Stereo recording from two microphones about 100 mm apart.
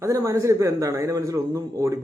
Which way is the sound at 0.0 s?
30° right (ahead or behind).